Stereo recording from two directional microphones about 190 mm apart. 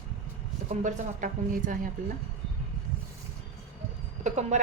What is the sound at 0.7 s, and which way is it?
A woman's voice, 40° right (ahead or behind).